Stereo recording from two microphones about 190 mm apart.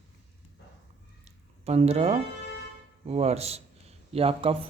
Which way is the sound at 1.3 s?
35° right (ahead or behind).